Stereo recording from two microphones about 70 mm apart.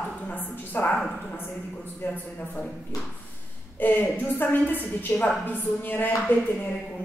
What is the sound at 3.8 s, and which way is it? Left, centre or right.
A woman's voice, left.